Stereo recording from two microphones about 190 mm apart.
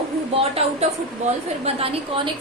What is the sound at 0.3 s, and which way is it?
A woman's voice, 30° right (ahead or behind).